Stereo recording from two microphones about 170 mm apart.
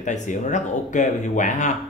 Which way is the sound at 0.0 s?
45° left (ahead or behind).